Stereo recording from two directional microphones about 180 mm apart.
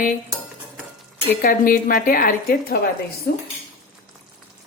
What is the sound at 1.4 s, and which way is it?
A woman's voice, 50° left (ahead or behind).